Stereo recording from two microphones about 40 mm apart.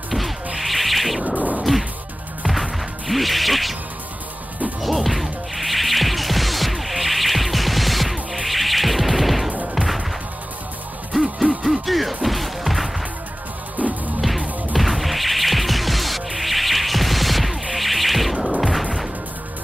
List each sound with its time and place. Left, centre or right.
0.6 s music: centre
1.2 s a sound: right
1.6 s whack: centre
2.4 s music: centre
4.8 s music: centre
11.6 s music: centre
14.8 s music: centre